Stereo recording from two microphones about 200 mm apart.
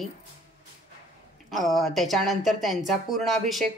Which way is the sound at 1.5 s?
Centre (ahead or behind).